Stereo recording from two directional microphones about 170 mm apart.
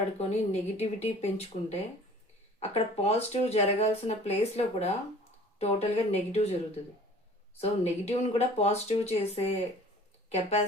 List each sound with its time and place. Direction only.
0.2 s speech: 40° left (ahead or behind)